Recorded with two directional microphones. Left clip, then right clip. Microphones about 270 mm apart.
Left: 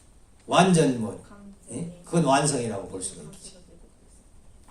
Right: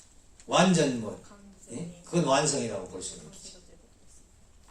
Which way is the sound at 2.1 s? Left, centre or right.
Left.